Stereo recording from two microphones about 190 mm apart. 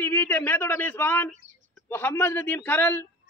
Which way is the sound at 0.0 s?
10° left (ahead or behind).